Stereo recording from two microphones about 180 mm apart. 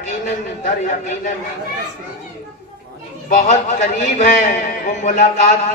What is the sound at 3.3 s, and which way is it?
A man's voice, 45° left (ahead or behind).